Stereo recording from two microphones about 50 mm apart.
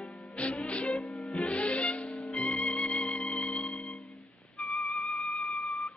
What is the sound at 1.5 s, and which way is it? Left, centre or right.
Music, left.